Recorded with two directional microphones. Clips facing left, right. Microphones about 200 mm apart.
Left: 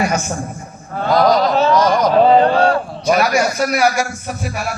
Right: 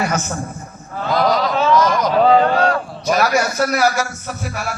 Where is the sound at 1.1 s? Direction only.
40° left (ahead or behind).